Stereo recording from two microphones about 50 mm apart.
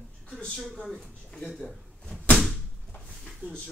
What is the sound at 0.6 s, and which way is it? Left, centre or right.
Speech, centre.